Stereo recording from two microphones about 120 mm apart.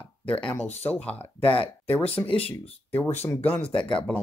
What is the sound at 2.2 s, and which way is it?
Speech, 30° left (ahead or behind).